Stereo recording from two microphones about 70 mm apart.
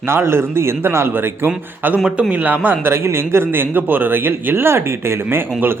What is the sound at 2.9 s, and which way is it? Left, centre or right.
Speech, right.